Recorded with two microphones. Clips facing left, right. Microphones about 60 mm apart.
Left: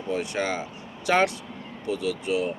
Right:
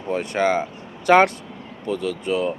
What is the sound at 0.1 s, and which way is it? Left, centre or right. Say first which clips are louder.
Speech: right 7 dB; right.